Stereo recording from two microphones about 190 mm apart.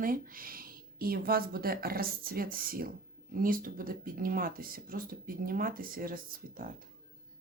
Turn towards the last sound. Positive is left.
turn(degrees=-45)  # may be behind; listen again after turning